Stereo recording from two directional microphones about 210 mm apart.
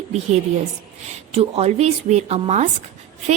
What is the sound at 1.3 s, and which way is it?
Speech, 30° right (ahead or behind).